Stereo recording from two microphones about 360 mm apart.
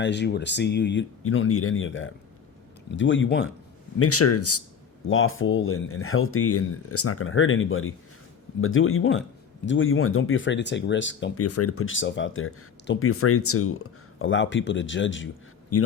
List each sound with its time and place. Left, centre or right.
0.0 s speech: left